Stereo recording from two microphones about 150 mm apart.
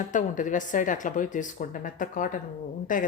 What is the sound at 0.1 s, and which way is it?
A woman's voice, 60° left (ahead or behind).